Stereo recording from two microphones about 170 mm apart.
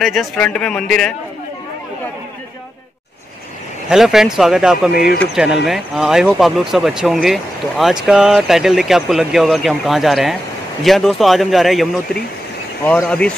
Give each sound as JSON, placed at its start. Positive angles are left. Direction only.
{"t": 0.0, "sound": "speech", "side_deg": 0}
{"t": 3.9, "sound": "speech", "side_deg": 0}
{"t": 4.9, "sound": "speech", "side_deg": 65}
{"t": 5.3, "sound": "speech", "side_deg": -5}